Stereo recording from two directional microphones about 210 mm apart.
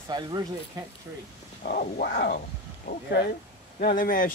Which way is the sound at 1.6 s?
45° left (ahead or behind).